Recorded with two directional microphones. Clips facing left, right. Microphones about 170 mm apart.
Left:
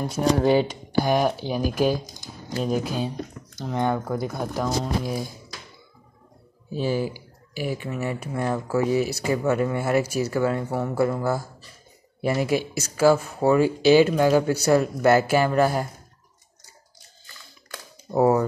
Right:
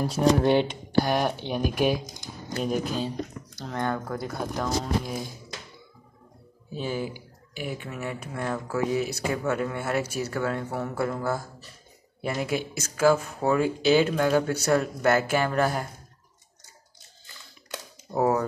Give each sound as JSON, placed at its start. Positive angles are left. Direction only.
{"t": 0.4, "sound": "speech", "side_deg": 5}
{"t": 4.2, "sound": "speech", "side_deg": 5}
{"t": 6.7, "sound": "speech", "side_deg": 5}
{"t": 18.1, "sound": "speech", "side_deg": 5}